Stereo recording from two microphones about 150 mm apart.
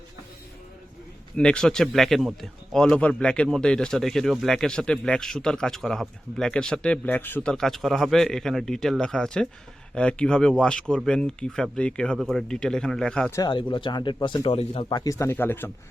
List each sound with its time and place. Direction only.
1.4 s speech: 5° left (ahead or behind)
13.3 s speech: 30° left (ahead or behind)
14.8 s speech: 25° left (ahead or behind)